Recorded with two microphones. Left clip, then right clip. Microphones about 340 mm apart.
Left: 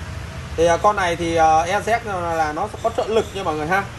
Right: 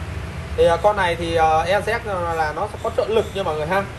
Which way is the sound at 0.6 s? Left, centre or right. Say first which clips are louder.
Even; left.